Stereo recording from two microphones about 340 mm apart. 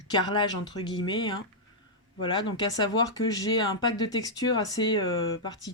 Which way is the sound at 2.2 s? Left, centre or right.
Centre.